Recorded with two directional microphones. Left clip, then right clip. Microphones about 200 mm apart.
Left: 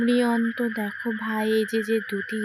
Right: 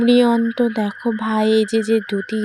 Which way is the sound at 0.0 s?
25° right (ahead or behind).